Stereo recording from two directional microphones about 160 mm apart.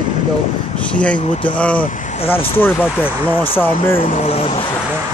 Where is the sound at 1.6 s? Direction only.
10° left (ahead or behind).